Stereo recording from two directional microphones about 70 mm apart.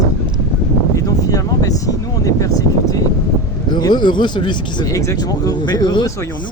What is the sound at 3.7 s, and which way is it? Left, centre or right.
Speech, left.